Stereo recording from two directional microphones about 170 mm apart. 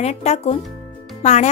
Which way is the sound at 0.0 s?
40° left (ahead or behind).